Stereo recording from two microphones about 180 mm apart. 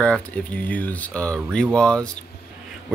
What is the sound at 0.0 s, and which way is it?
Speech, 5° left (ahead or behind).